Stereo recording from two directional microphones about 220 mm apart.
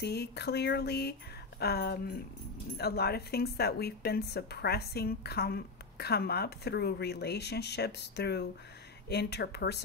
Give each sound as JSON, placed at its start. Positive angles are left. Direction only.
{"t": 0.0, "sound": "a woman's voice", "side_deg": 50}